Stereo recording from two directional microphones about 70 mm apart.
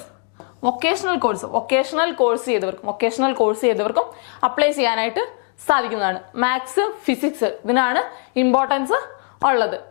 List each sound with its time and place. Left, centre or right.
0.6 s a woman's voice: centre
1.4 s speech: left
1.6 s a woman's voice: centre